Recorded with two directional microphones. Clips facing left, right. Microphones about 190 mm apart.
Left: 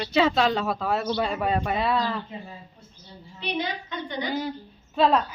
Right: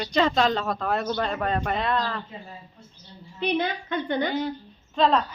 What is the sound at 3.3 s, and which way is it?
Speech, 55° right (ahead or behind).